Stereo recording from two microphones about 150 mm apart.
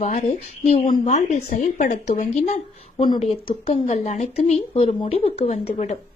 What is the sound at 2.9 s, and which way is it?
Speech, 30° left (ahead or behind).